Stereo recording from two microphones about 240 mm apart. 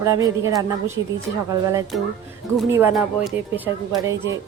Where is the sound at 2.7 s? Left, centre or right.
Centre.